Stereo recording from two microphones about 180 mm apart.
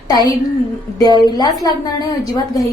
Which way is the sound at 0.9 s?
20° left (ahead or behind).